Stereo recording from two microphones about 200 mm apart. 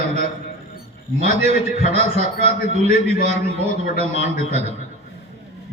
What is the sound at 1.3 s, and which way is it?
A man's voice, 30° right (ahead or behind).